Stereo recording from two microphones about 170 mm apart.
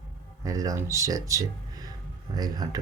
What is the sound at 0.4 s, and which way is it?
Speech, 20° right (ahead or behind).